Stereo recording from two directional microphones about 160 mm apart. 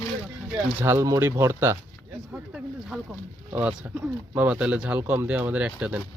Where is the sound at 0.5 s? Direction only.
15° right (ahead or behind).